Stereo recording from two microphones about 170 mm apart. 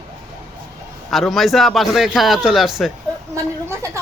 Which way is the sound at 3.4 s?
15° right (ahead or behind).